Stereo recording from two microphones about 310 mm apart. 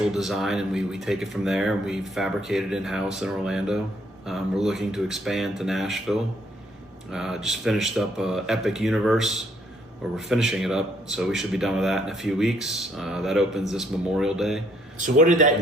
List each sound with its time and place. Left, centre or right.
0.0 s speech: centre
14.9 s a man's voice: right